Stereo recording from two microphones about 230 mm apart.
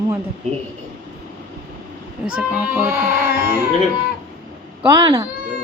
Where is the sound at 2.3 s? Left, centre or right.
Centre.